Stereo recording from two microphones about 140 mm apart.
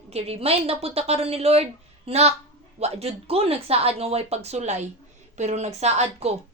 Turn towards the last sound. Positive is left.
turn(degrees=-50)  # may be behind; listen again after turning